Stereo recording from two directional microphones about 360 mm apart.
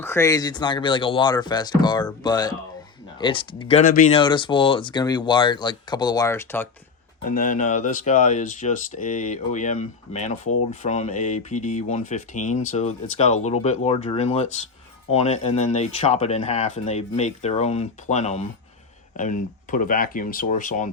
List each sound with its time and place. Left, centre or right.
0.0 s speech: centre
7.3 s speech: left